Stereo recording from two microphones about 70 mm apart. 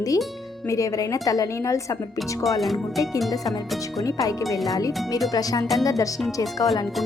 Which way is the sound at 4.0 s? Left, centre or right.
Left.